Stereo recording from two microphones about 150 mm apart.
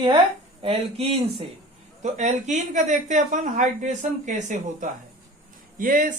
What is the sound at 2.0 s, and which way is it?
Speech, 50° right (ahead or behind).